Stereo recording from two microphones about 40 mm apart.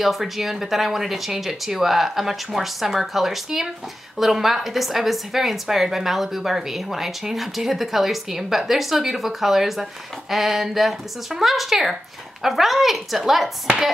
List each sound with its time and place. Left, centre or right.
0.0 s a woman's voice: centre